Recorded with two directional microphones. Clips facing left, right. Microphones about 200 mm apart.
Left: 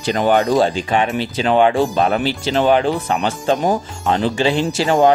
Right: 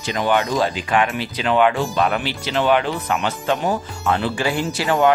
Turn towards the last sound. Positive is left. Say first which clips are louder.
# left 3 dB
turn(degrees=35)  # may be behind; listen again after turning